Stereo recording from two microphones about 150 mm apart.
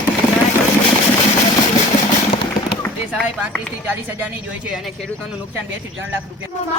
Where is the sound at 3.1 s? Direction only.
10° right (ahead or behind).